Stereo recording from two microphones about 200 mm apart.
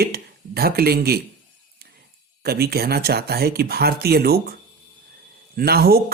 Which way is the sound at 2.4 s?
50° right (ahead or behind).